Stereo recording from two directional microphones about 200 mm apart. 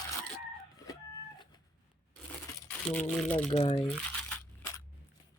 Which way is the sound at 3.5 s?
30° left (ahead or behind).